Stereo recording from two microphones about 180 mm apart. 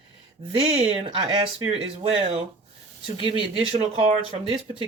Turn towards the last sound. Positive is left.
turn(degrees=-30)  # may be behind; listen again after turning